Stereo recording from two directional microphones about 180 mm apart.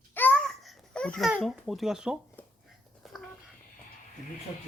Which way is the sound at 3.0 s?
Centre (ahead or behind).